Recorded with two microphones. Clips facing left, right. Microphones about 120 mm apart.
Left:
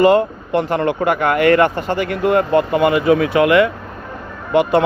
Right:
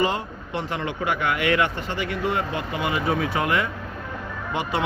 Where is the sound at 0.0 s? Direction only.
55° left (ahead or behind); by 3.7 s 80° left.